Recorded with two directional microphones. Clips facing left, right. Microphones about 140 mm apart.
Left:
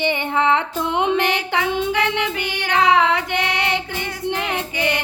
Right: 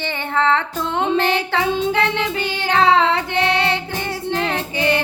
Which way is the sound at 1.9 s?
15° left (ahead or behind).